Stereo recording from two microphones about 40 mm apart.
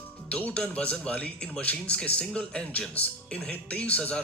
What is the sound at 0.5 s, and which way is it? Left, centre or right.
A man's voice, left.